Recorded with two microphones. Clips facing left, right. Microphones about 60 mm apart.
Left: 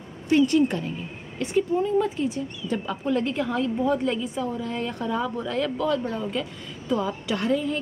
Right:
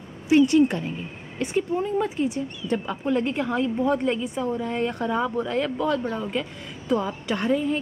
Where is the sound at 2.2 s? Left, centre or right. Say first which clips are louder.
Right 1 dB; centre.